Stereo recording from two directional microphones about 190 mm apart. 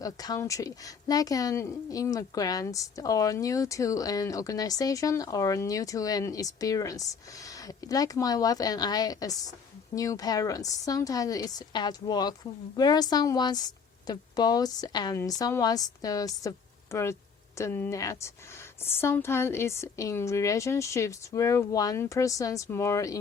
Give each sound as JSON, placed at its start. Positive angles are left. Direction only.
{"t": 0.0, "sound": "a woman's voice", "side_deg": 20}